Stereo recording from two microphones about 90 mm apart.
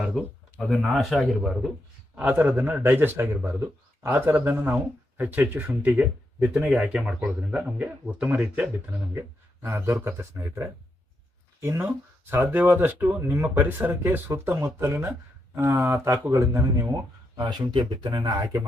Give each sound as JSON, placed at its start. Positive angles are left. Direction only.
{"t": 0.6, "sound": "speech", "side_deg": 5}
{"t": 2.1, "sound": "a man's voice", "side_deg": -20}
{"t": 9.1, "sound": "speech", "side_deg": -30}
{"t": 17.3, "sound": "speech", "side_deg": -50}